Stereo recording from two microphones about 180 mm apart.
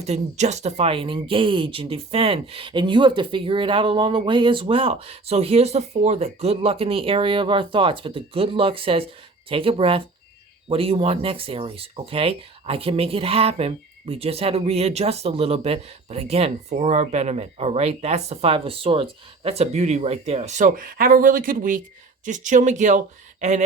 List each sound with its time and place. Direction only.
0.0 s speech: 40° right (ahead or behind)